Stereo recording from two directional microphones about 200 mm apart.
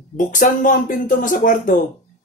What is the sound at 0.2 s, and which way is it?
Speech, 40° left (ahead or behind).